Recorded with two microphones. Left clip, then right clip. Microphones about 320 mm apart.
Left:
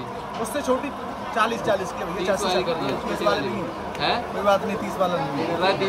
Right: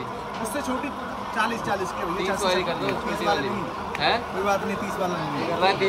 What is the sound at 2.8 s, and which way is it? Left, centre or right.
Speech, centre.